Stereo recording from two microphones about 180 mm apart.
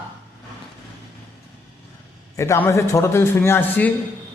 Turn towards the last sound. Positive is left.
turn(degrees=10)  # may be behind; listen again after turning